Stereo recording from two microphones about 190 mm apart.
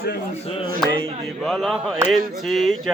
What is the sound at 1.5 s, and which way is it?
Speech, centre (ahead or behind).